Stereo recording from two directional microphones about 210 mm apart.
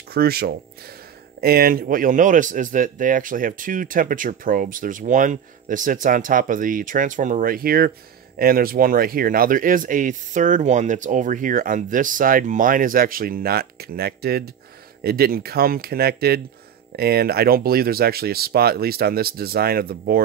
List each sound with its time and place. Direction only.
0.1 s speech: 50° right (ahead or behind)